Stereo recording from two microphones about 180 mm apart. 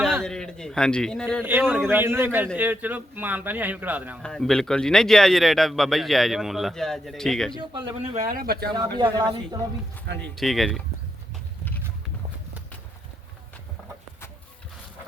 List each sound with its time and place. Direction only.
0.2 s a man's voice: 5° left (ahead or behind)
1.5 s a man's voice: 10° right (ahead or behind)
4.2 s a man's voice: 5° left (ahead or behind)
7.5 s speech: 25° right (ahead or behind)
8.1 s speech: 45° right (ahead or behind)
9.0 s speech: 20° right (ahead or behind)
10.2 s a man's voice: centre (ahead or behind)